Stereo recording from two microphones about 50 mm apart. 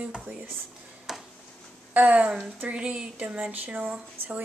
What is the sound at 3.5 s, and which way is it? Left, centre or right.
Speech, right.